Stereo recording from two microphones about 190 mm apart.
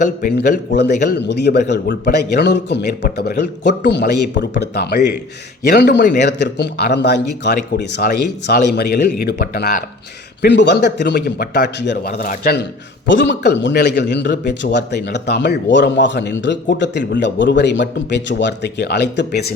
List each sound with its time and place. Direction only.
0.3 s a man's voice: 65° left (ahead or behind)
13.1 s a man's voice: 70° left (ahead or behind)